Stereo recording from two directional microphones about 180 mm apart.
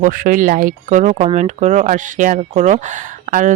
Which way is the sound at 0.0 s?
50° right (ahead or behind).